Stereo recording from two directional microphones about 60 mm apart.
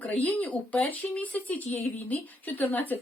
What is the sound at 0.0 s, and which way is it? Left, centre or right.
A woman's voice, left.